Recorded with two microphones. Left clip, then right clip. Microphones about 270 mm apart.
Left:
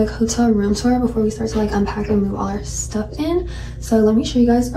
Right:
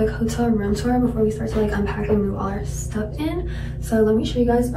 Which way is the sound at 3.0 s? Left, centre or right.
Centre.